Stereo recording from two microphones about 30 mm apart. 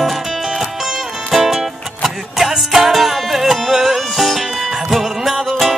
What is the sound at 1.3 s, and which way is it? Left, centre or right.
Music, centre.